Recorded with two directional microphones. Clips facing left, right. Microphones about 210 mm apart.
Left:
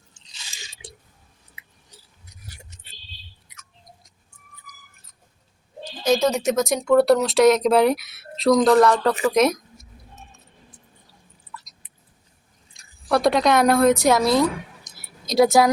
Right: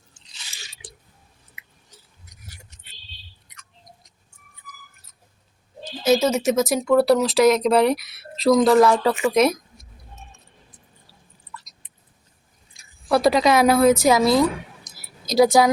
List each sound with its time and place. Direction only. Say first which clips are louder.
0.5 s drip: left 3 dB; 15° left (ahead or behind)
3.5 s rodents: even; 5° left (ahead or behind)
6.0 s speech: right 1 dB; 5° right (ahead or behind)
12.7 s a woman's voice: right 1 dB; centre (ahead or behind)
14.9 s a sound: right 1 dB; centre (ahead or behind)